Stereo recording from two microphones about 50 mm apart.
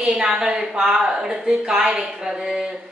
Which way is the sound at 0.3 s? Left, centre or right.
Centre.